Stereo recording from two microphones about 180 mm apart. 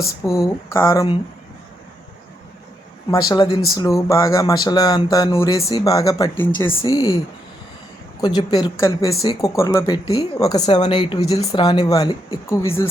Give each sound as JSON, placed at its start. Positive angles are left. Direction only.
{"t": 0.3, "sound": "speech", "side_deg": 15}
{"t": 3.1, "sound": "speech", "side_deg": 25}
{"t": 8.2, "sound": "speech", "side_deg": 25}